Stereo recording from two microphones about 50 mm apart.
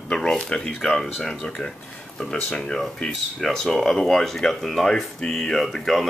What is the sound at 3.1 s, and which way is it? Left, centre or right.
Speech, centre.